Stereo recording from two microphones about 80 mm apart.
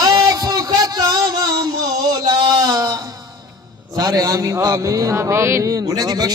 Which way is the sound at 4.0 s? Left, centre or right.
Right.